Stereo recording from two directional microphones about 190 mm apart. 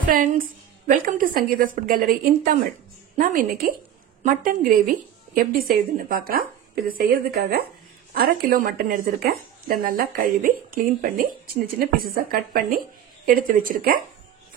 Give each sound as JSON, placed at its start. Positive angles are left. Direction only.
{"t": 0.0, "sound": "a woman's voice", "side_deg": -45}
{"t": 3.6, "sound": "a woman's voice", "side_deg": -45}